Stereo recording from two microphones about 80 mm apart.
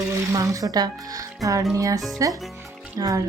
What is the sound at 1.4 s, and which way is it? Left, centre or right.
Music, right.